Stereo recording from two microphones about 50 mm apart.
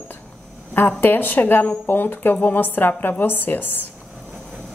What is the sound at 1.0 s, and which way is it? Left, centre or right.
Speech, left.